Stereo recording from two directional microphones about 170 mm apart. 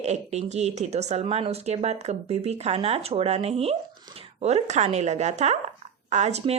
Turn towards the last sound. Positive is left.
turn(degrees=-40)  # may be behind; listen again after turning